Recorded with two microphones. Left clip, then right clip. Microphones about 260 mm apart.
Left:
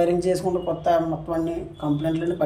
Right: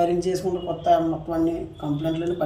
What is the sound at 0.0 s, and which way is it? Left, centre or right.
Speech, centre.